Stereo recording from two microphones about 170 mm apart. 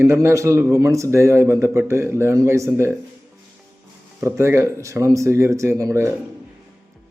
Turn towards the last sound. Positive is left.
turn(degrees=-15)  # may be behind; listen again after turning